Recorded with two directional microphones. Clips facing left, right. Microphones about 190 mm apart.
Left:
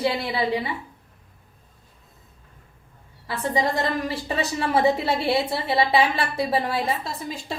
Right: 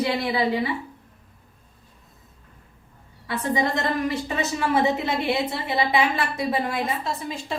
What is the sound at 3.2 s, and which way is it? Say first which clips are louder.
A woman's voice: even; 30° left (ahead or behind).